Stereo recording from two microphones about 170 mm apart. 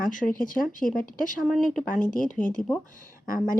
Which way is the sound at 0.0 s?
55° left (ahead or behind).